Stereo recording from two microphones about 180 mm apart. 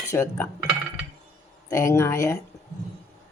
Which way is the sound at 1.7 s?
15° left (ahead or behind).